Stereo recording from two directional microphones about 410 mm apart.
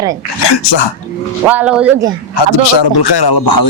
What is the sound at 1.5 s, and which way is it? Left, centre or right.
Speech, centre.